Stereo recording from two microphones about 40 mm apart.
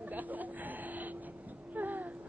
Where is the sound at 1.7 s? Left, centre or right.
Right.